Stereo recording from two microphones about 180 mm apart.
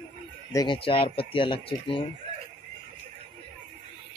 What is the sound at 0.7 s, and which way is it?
Speech, 30° left (ahead or behind).